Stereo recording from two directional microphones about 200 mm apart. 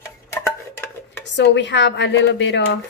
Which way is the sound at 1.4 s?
60° left (ahead or behind).